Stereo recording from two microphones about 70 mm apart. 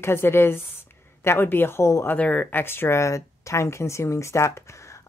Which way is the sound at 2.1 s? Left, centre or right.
Left.